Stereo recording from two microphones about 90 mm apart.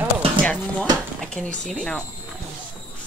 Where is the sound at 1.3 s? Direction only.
15° left (ahead or behind).